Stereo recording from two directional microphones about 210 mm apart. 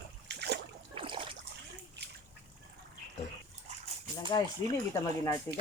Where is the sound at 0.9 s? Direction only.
25° right (ahead or behind).